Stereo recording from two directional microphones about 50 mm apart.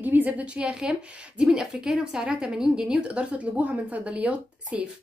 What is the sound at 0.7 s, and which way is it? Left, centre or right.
Speech, centre.